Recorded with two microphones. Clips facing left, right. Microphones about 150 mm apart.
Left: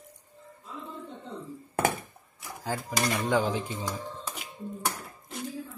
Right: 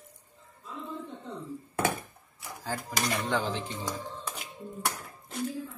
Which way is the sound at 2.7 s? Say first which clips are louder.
Left 2 dB; 10° left (ahead or behind).